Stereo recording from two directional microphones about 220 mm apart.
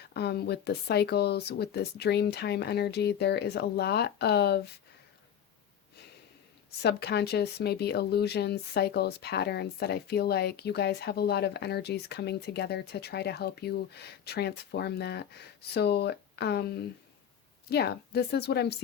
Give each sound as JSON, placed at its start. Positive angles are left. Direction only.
{"t": 0.1, "sound": "speech", "side_deg": 45}
{"t": 6.7, "sound": "speech", "side_deg": 45}